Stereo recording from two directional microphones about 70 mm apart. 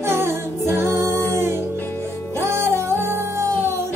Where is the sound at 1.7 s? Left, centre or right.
Left.